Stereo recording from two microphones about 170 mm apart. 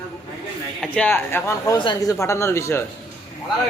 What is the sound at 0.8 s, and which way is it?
Speech, 5° left (ahead or behind).